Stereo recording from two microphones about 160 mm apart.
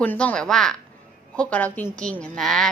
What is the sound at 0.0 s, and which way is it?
A woman's voice, 10° left (ahead or behind).